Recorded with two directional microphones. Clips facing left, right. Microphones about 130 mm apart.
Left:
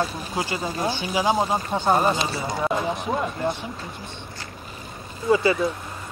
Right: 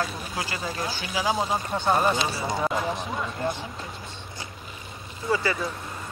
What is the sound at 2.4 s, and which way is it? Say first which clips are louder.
Speech: left 1 dB; centre (ahead or behind).